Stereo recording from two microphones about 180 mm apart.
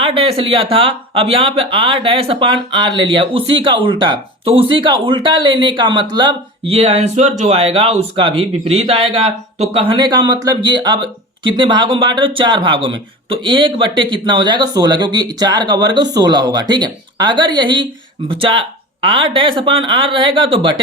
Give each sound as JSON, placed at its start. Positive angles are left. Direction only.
{"t": 0.0, "sound": "speech", "side_deg": -30}